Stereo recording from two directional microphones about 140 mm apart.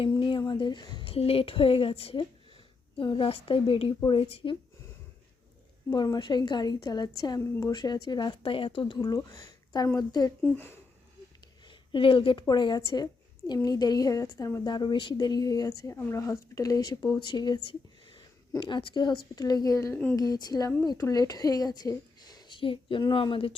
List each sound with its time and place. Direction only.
0.2 s a woman's voice: 35° left (ahead or behind)
5.9 s a woman's voice: 30° left (ahead or behind)
10.4 s speech: 15° left (ahead or behind)
11.7 s a woman's voice: 35° left (ahead or behind)